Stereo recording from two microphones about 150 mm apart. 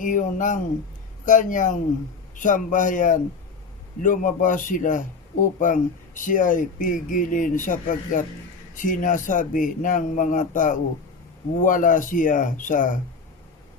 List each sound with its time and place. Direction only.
0.0 s speech: 60° left (ahead or behind)